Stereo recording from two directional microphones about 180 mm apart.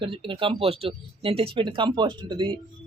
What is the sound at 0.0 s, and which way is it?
Speech, 30° right (ahead or behind).